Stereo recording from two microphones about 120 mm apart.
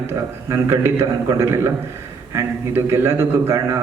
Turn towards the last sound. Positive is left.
turn(degrees=-20)  # may be behind; listen again after turning